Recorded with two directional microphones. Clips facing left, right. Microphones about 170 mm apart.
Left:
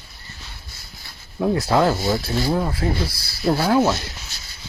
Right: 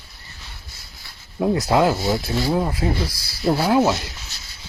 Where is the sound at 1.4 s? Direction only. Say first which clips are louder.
Even; 15° right (ahead or behind).